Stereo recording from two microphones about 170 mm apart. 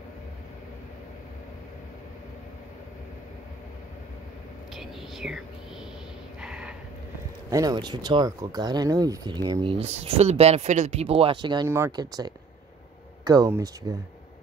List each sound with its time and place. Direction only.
4.7 s speech: centre (ahead or behind)
6.4 s a sound: 5° right (ahead or behind)
7.5 s speech: 25° right (ahead or behind)